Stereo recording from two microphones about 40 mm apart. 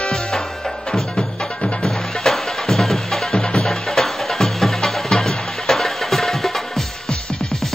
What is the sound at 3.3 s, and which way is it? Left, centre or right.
Music, centre.